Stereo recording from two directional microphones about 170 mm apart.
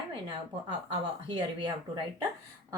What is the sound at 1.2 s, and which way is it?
Speech, 30° right (ahead or behind).